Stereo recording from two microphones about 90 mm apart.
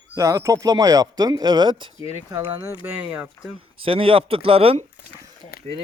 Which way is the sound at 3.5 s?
90° right.